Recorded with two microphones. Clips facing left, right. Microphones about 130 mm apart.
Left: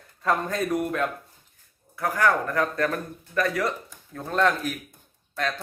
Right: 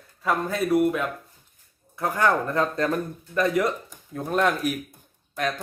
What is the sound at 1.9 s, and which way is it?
Speech, 25° right (ahead or behind).